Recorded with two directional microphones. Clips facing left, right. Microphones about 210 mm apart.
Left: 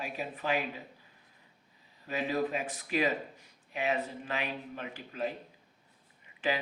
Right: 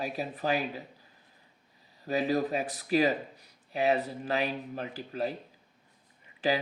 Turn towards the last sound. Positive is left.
turn(degrees=-35)  # may be behind; listen again after turning